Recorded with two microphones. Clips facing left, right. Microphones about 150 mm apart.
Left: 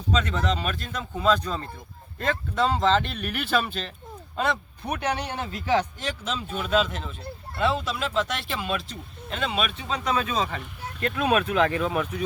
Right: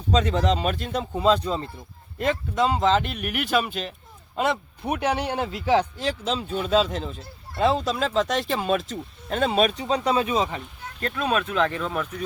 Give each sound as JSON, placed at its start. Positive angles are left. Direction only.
{"t": 0.3, "sound": "speech", "side_deg": -30}
{"t": 11.0, "sound": "speech", "side_deg": 10}